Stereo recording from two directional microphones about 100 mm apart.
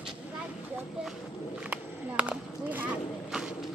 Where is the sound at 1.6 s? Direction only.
15° right (ahead or behind).